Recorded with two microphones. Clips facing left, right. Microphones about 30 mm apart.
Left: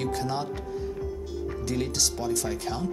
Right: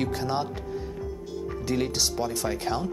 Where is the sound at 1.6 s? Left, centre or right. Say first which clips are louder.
Right 2 dB; centre.